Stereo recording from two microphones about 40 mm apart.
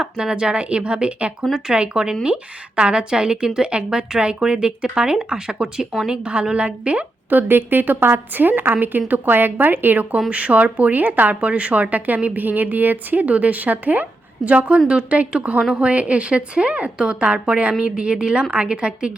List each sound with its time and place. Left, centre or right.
0.0 s a woman's voice: right
7.3 s a woman's voice: right
8.4 s speech: right
10.2 s a woman's voice: right